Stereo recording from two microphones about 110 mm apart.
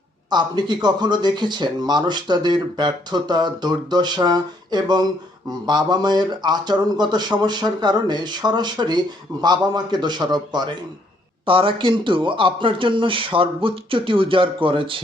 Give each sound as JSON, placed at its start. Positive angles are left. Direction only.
{"t": 0.3, "sound": "speech", "side_deg": -40}
{"t": 11.4, "sound": "a man's voice", "side_deg": -50}